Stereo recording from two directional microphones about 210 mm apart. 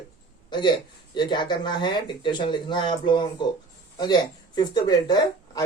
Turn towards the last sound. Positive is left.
turn(degrees=20)  # may be behind; listen again after turning